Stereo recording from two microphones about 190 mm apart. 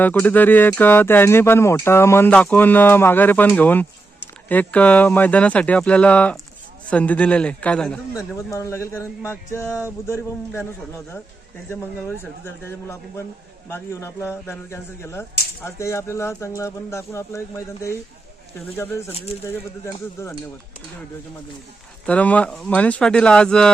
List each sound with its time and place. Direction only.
0.0 s speech: 10° left (ahead or behind)
8.4 s speech: 15° left (ahead or behind)
11.7 s speech: 10° left (ahead or behind)
19.1 s speech: 30° left (ahead or behind)
19.5 s speech: 15° left (ahead or behind)
22.0 s speech: 5° left (ahead or behind)